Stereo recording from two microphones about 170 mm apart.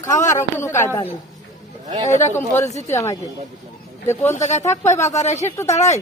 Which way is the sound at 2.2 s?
15° left (ahead or behind).